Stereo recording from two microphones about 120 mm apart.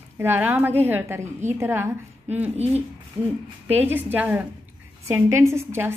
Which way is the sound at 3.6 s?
15° right (ahead or behind).